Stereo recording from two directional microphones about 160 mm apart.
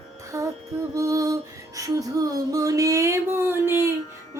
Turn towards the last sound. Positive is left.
turn(degrees=-15)  # may be behind; listen again after turning